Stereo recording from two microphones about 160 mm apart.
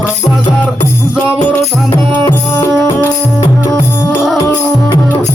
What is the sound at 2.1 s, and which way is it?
Music, 10° left (ahead or behind).